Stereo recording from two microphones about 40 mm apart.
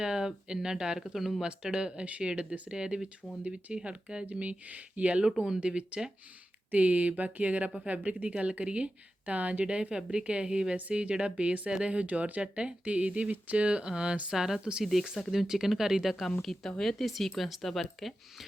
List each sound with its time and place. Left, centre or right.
0.0 s speech: centre
2.0 s speech: right
2.4 s speech: right
4.3 s speech: right
6.7 s speech: right
9.9 s speech: right
10.8 s speech: right
14.3 s speech: centre
14.6 s speech: right
15.3 s speech: centre